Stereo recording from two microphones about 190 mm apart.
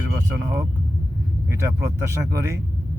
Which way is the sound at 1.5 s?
15° right (ahead or behind).